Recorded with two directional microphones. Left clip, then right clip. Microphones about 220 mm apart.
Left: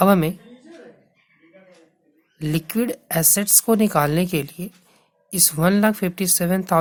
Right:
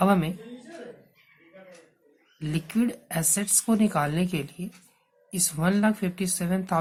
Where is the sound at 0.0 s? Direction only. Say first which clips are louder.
Left 7 dB; 45° left (ahead or behind).